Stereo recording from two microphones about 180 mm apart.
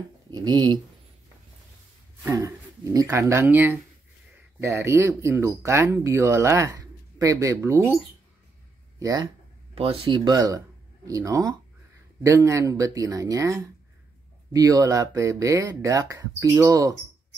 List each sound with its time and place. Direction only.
0.3 s speech: 20° right (ahead or behind)
2.2 s speech: 20° right (ahead or behind)
9.8 s speech: 30° right (ahead or behind)